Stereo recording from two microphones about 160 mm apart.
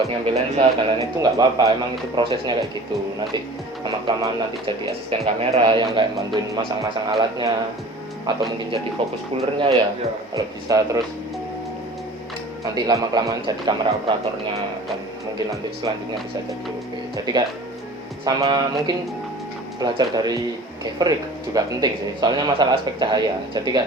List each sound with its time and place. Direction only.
0.0 s speech: 40° right (ahead or behind)
1.2 s speech: 25° right (ahead or behind)
3.8 s speech: 30° right (ahead or behind)
5.2 s speech: 40° right (ahead or behind)
10.3 s speech: 20° right (ahead or behind)
12.7 s speech: 25° right (ahead or behind)
18.3 s speech: 25° right (ahead or behind)
21.5 s speech: 25° right (ahead or behind)